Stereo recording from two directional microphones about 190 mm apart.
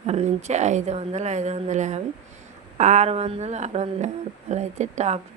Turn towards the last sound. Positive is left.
turn(degrees=-35)  # may be behind; listen again after turning